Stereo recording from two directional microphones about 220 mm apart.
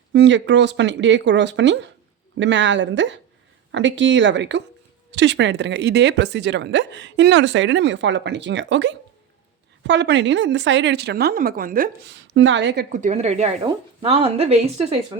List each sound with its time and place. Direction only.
0.1 s a woman's voice: 55° right (ahead or behind)
12.3 s a woman's voice: 55° right (ahead or behind)
12.9 s speech: 30° right (ahead or behind)